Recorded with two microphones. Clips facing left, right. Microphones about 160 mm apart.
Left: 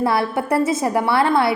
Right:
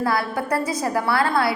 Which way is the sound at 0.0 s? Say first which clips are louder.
Left 3 dB; 25° left (ahead or behind).